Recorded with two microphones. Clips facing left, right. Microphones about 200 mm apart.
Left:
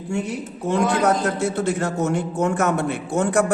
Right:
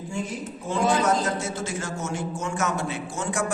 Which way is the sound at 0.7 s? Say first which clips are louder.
Left 3 dB; 65° left (ahead or behind).